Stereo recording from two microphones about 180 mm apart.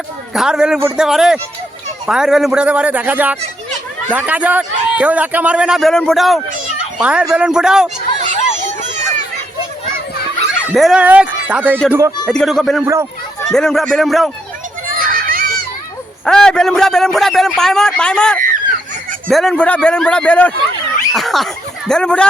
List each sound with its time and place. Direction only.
0.3 s a man's voice: 5° right (ahead or behind)
8.2 s a sound: 45° right (ahead or behind)
10.7 s a man's voice: centre (ahead or behind)
12.3 s a man's voice: 5° left (ahead or behind)
12.8 s a man's voice: 15° right (ahead or behind)
13.5 s a man's voice: 5° left (ahead or behind)
14.9 s children playing: 50° right (ahead or behind)
16.2 s a man's voice: 5° left (ahead or behind)